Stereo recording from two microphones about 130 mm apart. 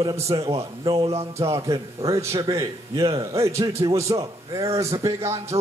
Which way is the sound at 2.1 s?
25° right (ahead or behind).